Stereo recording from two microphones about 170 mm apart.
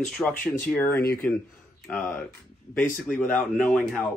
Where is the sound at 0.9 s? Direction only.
60° left (ahead or behind).